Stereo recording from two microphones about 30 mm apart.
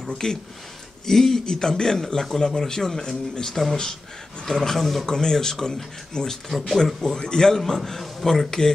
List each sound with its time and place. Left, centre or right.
0.2 s a man's voice: left
1.0 s speech: centre
1.4 s a man's voice: left; by 5.0 s centre
5.0 s a man's voice: left